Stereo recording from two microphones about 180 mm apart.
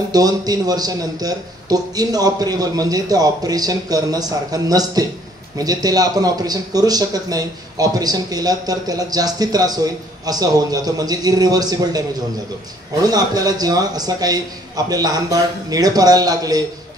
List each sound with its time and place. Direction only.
0.1 s speech: 20° right (ahead or behind)
13.0 s speech: 20° right (ahead or behind)